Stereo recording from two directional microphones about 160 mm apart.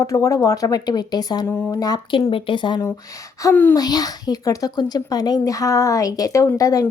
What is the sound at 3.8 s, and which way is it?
Speech, 25° left (ahead or behind).